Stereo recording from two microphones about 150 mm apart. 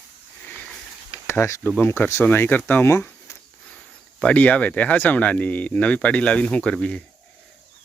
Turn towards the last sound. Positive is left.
turn(degrees=5)  # may be behind; listen again after turning